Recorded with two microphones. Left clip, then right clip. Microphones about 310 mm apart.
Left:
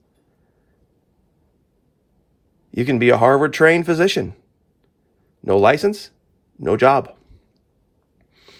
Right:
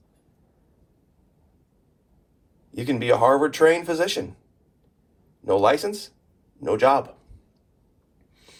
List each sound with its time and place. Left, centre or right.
2.7 s speech: left
5.4 s speech: left